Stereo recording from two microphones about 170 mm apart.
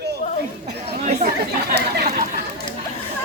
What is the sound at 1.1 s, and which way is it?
Chatter, 40° right (ahead or behind).